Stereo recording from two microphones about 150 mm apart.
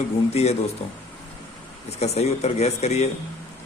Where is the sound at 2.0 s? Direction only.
45° left (ahead or behind).